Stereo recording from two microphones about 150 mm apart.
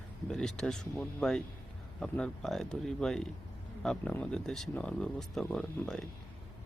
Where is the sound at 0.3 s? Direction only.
5° left (ahead or behind).